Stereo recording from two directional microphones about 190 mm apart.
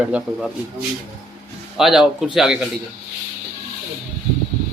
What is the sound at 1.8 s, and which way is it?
Speech, centre (ahead or behind).